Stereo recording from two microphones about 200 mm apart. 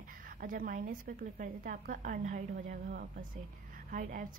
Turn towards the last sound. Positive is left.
turn(degrees=-40)  # may be behind; listen again after turning